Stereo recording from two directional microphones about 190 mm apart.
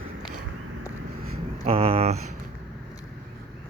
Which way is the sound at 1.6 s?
30° right (ahead or behind).